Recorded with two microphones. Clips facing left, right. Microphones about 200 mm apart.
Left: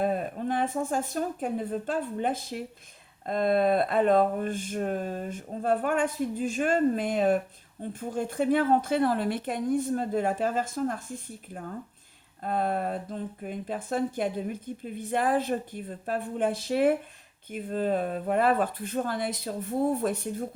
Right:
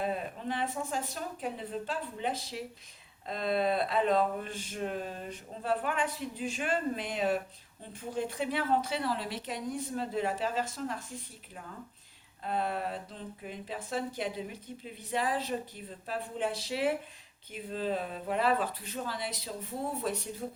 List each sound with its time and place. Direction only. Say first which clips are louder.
0.0 s speech: left 6 dB; 50° left (ahead or behind)